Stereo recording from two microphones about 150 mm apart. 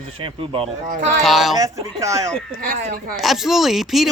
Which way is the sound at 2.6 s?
65° right (ahead or behind).